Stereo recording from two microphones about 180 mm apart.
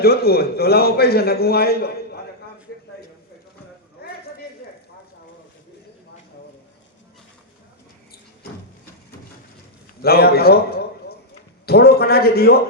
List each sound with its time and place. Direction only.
0.0 s a man's voice: 60° left (ahead or behind)
4.0 s clip-clop: 60° left (ahead or behind)
10.0 s a man's voice: 60° left (ahead or behind)